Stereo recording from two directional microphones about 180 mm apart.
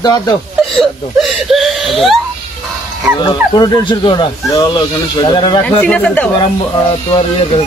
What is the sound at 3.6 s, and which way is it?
Speech, 20° left (ahead or behind).